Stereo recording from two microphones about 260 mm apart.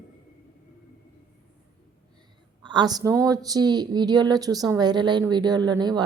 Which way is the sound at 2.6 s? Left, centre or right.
Centre.